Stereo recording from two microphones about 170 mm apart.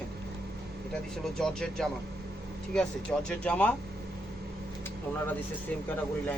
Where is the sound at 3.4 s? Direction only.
10° left (ahead or behind).